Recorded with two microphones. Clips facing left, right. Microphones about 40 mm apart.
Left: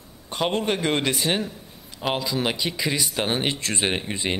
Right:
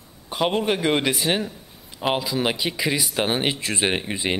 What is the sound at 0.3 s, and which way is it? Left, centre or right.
A man's voice, centre.